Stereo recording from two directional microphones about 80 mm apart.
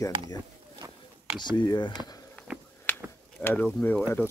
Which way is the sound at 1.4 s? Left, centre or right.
Left.